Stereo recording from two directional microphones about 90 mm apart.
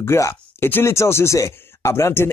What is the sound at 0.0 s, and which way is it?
Speech, 35° left (ahead or behind).